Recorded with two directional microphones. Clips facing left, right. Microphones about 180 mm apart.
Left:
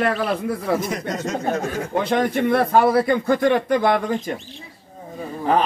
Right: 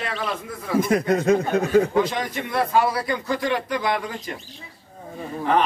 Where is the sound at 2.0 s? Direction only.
60° left (ahead or behind).